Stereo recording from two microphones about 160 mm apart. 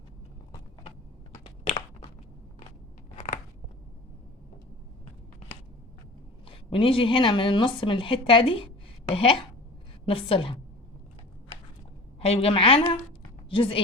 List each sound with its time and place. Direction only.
6.4 s a woman's voice: 35° left (ahead or behind)
12.2 s a woman's voice: 40° left (ahead or behind)